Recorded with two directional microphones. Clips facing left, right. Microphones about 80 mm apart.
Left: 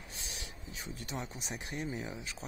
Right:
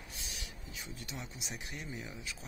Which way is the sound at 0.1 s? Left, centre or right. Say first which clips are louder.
Left 2 dB; left.